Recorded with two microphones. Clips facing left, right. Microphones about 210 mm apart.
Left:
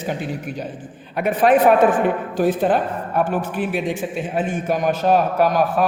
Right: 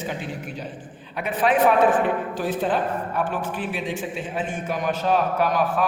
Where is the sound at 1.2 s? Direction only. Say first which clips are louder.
Left 5 dB; 45° left (ahead or behind).